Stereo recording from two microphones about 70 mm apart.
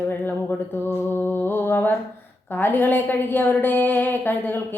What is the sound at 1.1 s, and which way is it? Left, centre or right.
Mantra, left.